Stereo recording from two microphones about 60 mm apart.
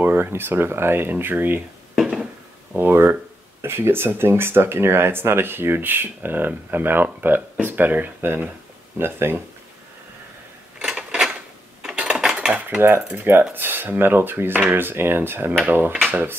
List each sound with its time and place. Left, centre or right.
0.0 s speech: right
2.0 s a sound: centre
2.8 s speech: right
10.8 s a sound: centre
11.8 s dishes: centre
12.5 s speech: right